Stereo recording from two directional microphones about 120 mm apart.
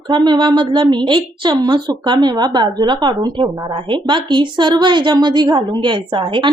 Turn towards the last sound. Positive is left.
turn(degrees=-40)  # may be behind; listen again after turning